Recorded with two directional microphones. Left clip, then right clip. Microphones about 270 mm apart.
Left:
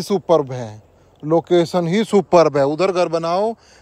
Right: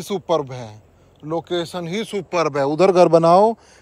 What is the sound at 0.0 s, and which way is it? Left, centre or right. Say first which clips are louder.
Speech: left 5 dB; centre.